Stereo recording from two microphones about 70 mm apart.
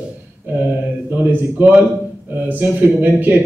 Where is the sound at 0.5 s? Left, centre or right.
Right.